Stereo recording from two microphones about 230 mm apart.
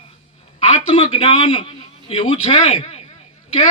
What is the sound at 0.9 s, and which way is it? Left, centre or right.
A man's voice, left.